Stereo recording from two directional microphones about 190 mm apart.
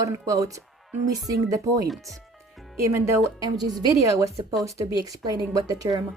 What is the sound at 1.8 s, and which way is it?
Speech, centre (ahead or behind).